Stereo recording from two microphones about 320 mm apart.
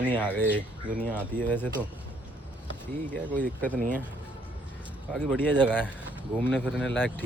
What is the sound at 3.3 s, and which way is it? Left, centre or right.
Speech, centre.